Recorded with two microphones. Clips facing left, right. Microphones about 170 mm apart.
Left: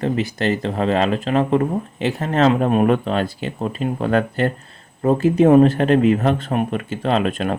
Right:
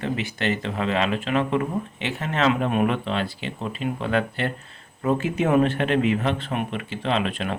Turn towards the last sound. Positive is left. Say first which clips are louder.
# left 5 dB
turn(degrees=45)  # may be behind; listen again after turning